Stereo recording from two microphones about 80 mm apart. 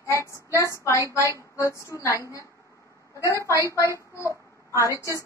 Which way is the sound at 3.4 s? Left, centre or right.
Right.